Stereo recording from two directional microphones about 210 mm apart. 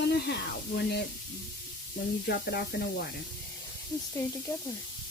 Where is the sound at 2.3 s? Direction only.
50° left (ahead or behind).